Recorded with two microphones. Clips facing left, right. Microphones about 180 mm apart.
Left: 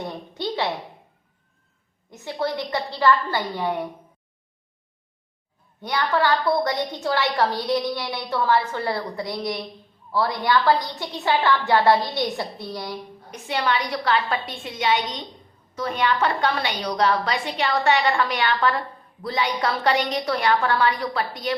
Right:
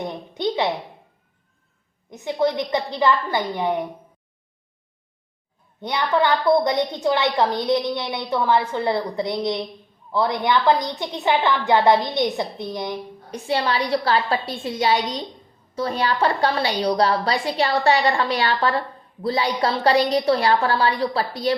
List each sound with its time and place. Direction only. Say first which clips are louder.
0.0 s a sound: right 4 dB; 20° right (ahead or behind)
2.0 s a woman's voice: right 5 dB; 15° right (ahead or behind)
5.8 s a woman's voice: right 2 dB; 20° right (ahead or behind)
13.3 s a woman's voice: right 2 dB; 30° right (ahead or behind)